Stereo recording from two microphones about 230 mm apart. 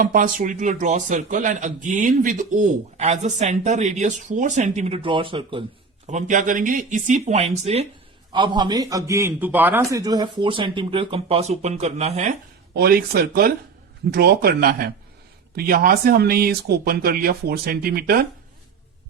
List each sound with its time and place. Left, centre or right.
0.0 s a man's voice: right
6.1 s a man's voice: right
12.7 s a man's voice: right